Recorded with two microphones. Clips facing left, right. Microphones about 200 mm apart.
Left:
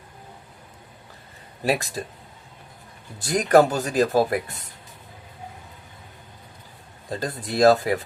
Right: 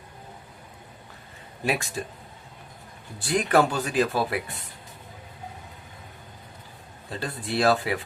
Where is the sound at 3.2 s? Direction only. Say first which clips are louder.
Left 5 dB; 40° left (ahead or behind).